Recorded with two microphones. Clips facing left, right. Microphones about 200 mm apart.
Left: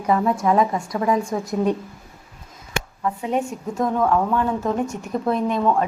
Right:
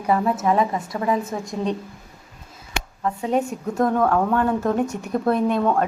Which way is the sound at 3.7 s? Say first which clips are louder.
Right 1 dB; 60° right (ahead or behind).